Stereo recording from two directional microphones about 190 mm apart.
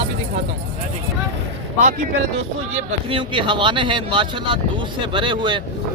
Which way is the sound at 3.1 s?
25° right (ahead or behind).